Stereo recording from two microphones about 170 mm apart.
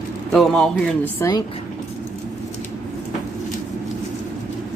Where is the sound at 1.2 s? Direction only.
15° left (ahead or behind).